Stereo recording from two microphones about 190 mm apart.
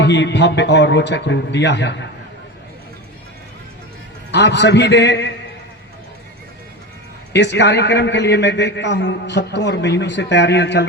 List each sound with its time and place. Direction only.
0.0 s a man's voice: 65° left (ahead or behind)
4.3 s a man's voice: 65° left (ahead or behind)
7.3 s a man's voice: 65° left (ahead or behind)